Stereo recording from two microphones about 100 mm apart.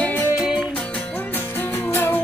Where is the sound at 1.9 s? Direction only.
25° left (ahead or behind).